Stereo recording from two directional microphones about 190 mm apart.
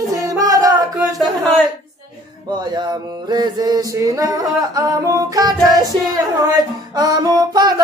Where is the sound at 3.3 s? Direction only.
20° right (ahead or behind).